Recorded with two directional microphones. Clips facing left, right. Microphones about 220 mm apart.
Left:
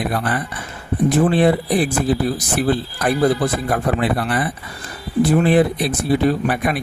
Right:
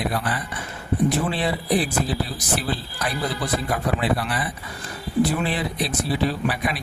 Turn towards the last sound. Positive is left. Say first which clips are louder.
# left 6 dB
turn(degrees=55)  # may be behind; listen again after turning